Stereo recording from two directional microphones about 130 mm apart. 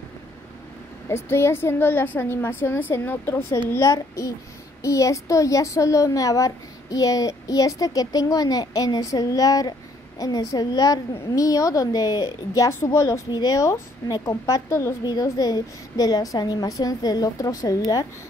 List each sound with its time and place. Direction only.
1.0 s a woman's voice: 20° left (ahead or behind)